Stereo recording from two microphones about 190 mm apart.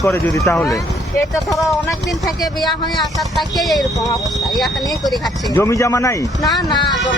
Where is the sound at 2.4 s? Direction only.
20° left (ahead or behind).